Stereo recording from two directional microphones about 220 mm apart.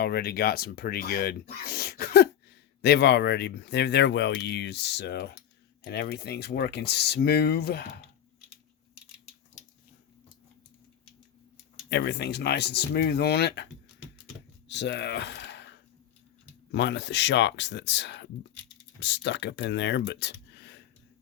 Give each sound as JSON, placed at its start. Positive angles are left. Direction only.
{"t": 0.0, "sound": "speech", "side_deg": 45}
{"t": 11.9, "sound": "speech", "side_deg": 50}
{"t": 14.7, "sound": "speech", "side_deg": 50}
{"t": 16.7, "sound": "speech", "side_deg": 50}